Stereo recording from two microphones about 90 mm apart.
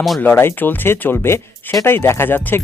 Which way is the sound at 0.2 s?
20° left (ahead or behind).